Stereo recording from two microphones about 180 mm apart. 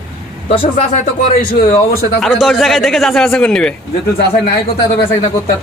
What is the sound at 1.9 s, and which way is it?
Speech, 55° left (ahead or behind).